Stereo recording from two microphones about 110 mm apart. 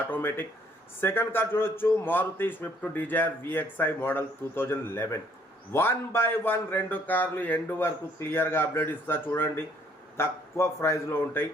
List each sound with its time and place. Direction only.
0.1 s a man's voice: 20° left (ahead or behind)